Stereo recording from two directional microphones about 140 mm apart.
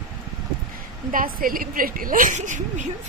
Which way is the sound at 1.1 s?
85° right.